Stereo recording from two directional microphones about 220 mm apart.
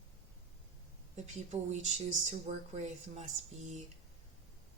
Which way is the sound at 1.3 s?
30° right (ahead or behind).